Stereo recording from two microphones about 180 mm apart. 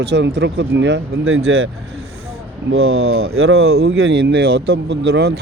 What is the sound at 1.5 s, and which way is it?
Speech, 90° right.